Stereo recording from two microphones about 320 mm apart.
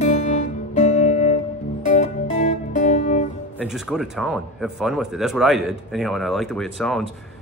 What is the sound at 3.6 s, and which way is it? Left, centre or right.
Speech, centre.